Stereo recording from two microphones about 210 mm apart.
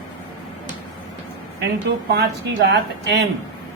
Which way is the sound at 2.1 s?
50° right (ahead or behind).